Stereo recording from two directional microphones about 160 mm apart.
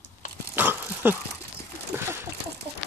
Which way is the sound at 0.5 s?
10° right (ahead or behind).